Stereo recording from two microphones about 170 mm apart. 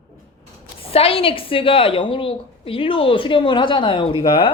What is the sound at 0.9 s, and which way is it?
A woman's voice, 35° left (ahead or behind).